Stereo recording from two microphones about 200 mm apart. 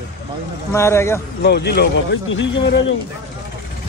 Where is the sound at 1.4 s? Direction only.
55° left (ahead or behind).